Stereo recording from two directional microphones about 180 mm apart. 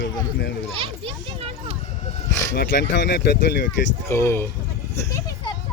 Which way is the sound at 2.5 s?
70° left (ahead or behind).